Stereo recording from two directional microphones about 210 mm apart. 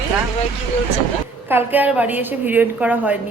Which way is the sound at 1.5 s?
10° right (ahead or behind).